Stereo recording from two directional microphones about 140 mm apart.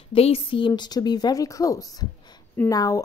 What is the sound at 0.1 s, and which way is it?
A woman's voice, 45° left (ahead or behind).